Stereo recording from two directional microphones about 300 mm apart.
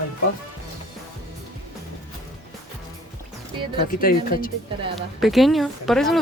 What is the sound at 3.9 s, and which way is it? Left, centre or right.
Speech, left.